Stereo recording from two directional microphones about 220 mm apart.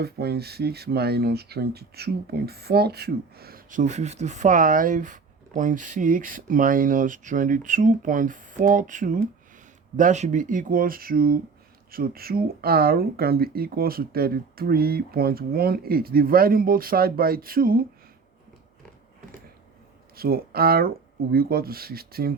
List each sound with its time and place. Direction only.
0.0 s speech: 45° right (ahead or behind)
20.1 s speech: 45° right (ahead or behind)